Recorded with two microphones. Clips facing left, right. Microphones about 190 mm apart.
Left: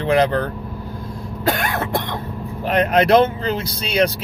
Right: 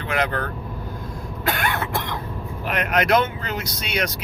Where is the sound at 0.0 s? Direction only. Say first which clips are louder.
Left 8 dB; 35° left (ahead or behind).